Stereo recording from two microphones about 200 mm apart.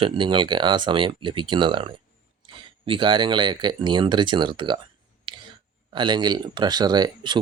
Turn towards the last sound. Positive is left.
turn(degrees=-20)  # may be behind; listen again after turning